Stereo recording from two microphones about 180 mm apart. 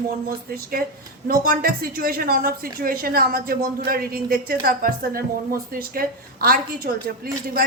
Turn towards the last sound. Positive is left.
turn(degrees=-55)  # may be behind; listen again after turning